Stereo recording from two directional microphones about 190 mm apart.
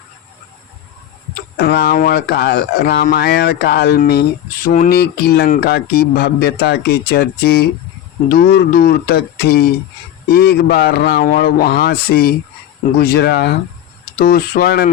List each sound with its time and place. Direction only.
1.4 s speech: 55° left (ahead or behind)